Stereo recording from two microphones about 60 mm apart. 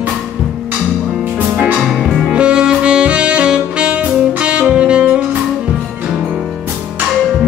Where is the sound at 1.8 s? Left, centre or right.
Centre.